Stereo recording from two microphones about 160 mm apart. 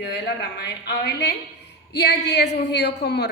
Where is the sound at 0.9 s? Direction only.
90° left.